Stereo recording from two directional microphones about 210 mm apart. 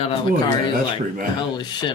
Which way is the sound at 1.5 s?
20° left (ahead or behind).